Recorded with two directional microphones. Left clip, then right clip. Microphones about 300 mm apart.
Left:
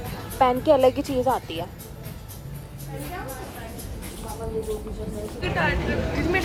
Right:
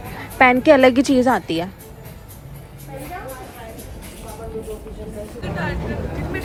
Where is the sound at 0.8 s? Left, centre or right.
Right.